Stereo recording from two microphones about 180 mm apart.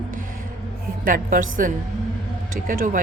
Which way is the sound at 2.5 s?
50° right (ahead or behind).